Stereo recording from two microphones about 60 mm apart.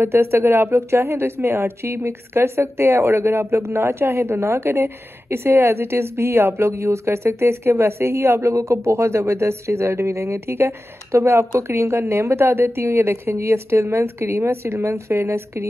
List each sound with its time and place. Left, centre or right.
0.0 s speech: right
6.7 s speech: right